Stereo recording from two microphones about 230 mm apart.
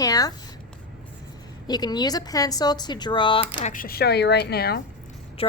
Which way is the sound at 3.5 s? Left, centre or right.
Left.